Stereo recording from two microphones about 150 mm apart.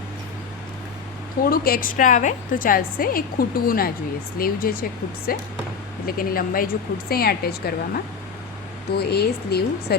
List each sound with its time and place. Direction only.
1.5 s a woman's voice: 75° left (ahead or behind)
7.1 s speech: 90° left